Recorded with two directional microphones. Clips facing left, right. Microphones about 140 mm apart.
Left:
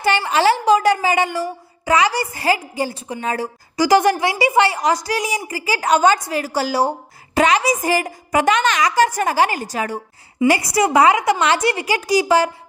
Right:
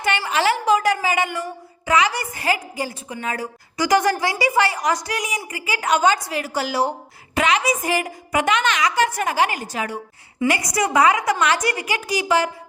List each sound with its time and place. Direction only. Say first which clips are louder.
0.0 s a woman's voice: left 4 dB; 30° left (ahead or behind)
10.4 s a woman's voice: left 5 dB; 30° left (ahead or behind)